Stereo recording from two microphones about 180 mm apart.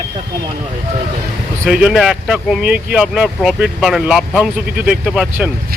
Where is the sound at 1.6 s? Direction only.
5° right (ahead or behind).